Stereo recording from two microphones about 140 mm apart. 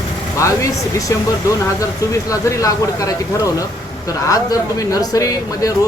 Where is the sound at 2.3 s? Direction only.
25° left (ahead or behind).